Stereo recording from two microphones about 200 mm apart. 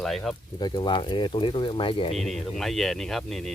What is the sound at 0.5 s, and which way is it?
Speech, 20° left (ahead or behind).